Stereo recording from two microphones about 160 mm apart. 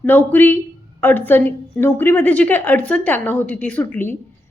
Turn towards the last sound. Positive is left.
turn(degrees=15)  # may be behind; listen again after turning